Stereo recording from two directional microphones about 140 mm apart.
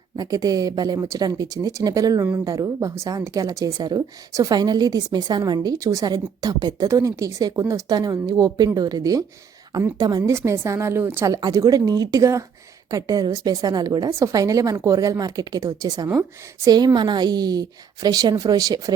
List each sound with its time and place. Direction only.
0.2 s a woman's voice: 25° right (ahead or behind)
11.3 s a woman's voice: 25° right (ahead or behind)